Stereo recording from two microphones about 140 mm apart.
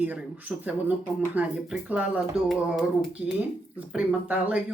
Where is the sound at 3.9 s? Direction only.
10° right (ahead or behind).